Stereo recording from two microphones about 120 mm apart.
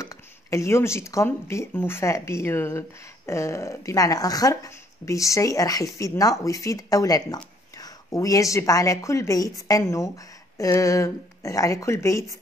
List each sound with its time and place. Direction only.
0.0 s speech: 25° left (ahead or behind)